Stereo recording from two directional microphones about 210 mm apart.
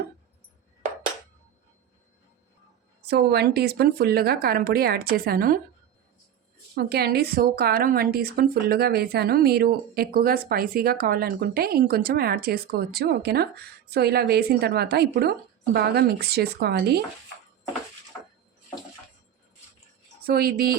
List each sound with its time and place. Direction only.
3.1 s a woman's voice: 50° right (ahead or behind)
6.7 s a woman's voice: 50° right (ahead or behind)
20.2 s a woman's voice: 45° right (ahead or behind)